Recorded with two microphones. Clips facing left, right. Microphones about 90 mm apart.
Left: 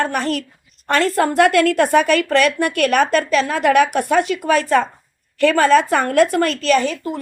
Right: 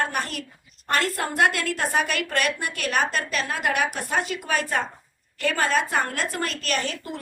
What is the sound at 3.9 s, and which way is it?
A woman's voice, 70° left (ahead or behind).